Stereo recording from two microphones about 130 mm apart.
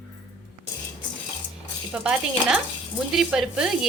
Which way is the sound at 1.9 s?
10° right (ahead or behind).